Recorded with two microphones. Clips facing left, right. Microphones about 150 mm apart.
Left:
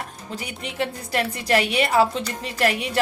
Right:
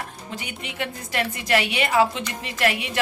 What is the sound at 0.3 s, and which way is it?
A woman's voice, 35° left (ahead or behind).